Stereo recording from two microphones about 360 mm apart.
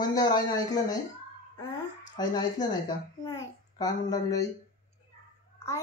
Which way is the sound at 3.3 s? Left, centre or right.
Centre.